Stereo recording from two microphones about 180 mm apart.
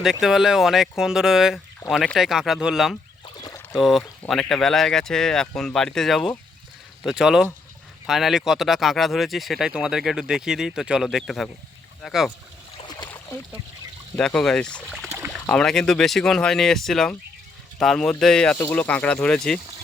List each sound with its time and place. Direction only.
0.0 s speech: centre (ahead or behind)
3.2 s rowboat: 20° left (ahead or behind)
3.8 s speech: centre (ahead or behind)
12.7 s boat: 25° left (ahead or behind)
14.2 s speech: 5° left (ahead or behind)